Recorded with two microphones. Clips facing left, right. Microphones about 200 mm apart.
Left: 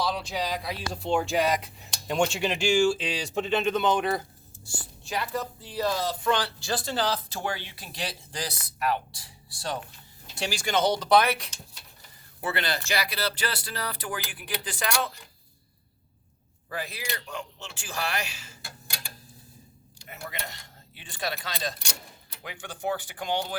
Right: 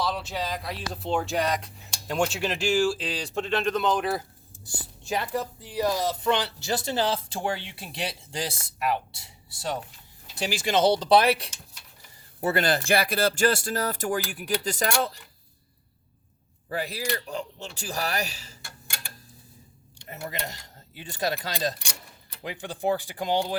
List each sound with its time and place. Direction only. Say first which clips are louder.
0.0 s speech: even; centre (ahead or behind)
4.6 s speech: right 1 dB; 20° right (ahead or behind)
12.4 s speech: right 6 dB; 45° right (ahead or behind)
16.6 s speech: right 5 dB; 35° right (ahead or behind)
21.0 s speech: right 5 dB; 40° right (ahead or behind)